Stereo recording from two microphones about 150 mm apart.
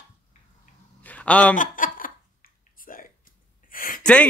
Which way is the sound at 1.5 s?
65° left (ahead or behind).